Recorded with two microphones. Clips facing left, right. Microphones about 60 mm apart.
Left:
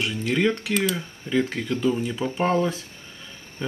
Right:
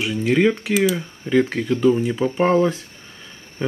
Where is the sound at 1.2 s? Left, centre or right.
Centre.